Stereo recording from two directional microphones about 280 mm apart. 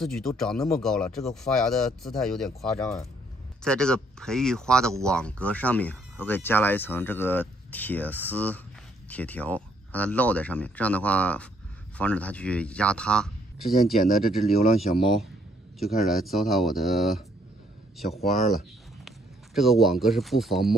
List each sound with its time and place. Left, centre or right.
0.0 s speech: centre
14.5 s speech: left
15.8 s speech: centre
19.0 s speech: centre